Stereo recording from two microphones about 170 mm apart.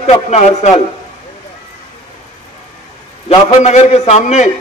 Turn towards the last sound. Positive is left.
turn(degrees=45)  # may be behind; listen again after turning